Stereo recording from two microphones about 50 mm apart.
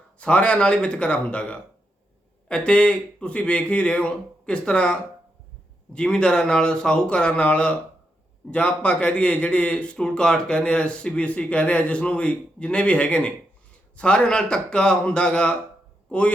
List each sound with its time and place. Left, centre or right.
0.2 s speech: left